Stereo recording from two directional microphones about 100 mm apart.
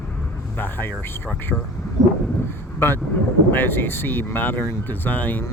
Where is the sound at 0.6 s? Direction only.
20° left (ahead or behind).